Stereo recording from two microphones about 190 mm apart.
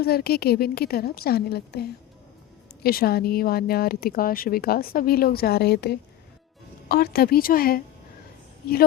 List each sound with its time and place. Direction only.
0.0 s a woman's voice: 55° left (ahead or behind)